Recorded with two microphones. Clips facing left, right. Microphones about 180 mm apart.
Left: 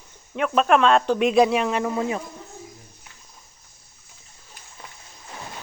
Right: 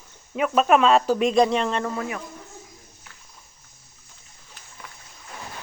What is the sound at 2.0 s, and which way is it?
Speech, 25° left (ahead or behind).